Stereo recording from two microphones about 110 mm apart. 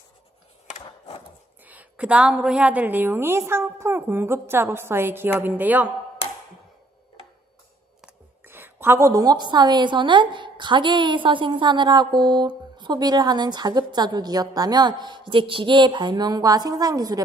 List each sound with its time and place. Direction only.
0.7 s a sound: 65° left (ahead or behind)
1.6 s a woman's voice: 15° right (ahead or behind)
8.4 s a woman's voice: 20° right (ahead or behind)